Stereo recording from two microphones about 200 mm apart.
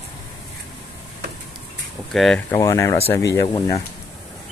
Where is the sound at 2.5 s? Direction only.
15° left (ahead or behind).